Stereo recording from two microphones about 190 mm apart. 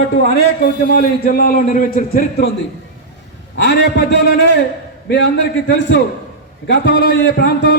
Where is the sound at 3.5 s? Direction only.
60° left (ahead or behind).